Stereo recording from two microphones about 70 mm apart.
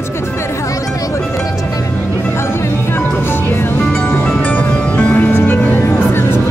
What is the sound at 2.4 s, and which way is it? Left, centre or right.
Music, left.